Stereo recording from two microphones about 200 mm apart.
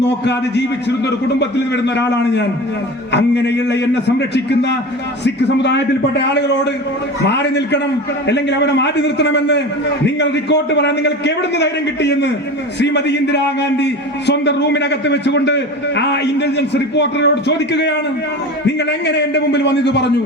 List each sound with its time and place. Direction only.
0.0 s a man's voice: 60° left (ahead or behind)